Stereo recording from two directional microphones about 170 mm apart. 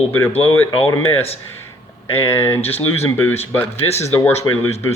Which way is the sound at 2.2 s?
15° left (ahead or behind).